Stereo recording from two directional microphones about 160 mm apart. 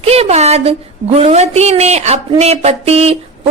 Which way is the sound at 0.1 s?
40° right (ahead or behind).